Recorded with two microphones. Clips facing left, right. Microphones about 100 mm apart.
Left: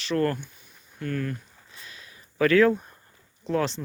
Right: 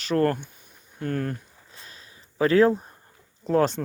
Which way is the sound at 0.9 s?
40° right (ahead or behind).